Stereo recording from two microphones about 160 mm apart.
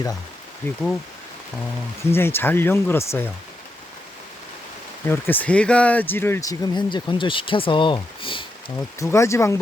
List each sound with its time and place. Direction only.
0.6 s speech: 15° left (ahead or behind)
2.0 s speech: 15° left (ahead or behind)
5.0 s speech: 15° left (ahead or behind); by 8.4 s 30° left (ahead or behind)
9.0 s speech: 20° left (ahead or behind)